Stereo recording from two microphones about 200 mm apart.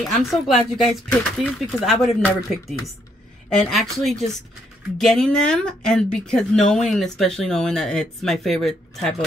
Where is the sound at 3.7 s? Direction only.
Centre (ahead or behind).